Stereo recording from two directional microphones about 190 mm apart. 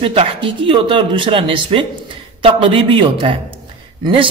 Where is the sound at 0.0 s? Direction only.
30° right (ahead or behind).